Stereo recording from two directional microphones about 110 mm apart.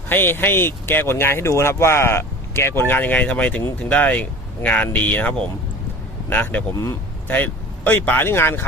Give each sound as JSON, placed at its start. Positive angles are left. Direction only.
{"t": 0.1, "sound": "speech", "side_deg": 20}